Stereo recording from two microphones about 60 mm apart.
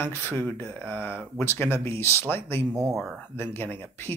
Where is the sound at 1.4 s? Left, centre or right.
Left.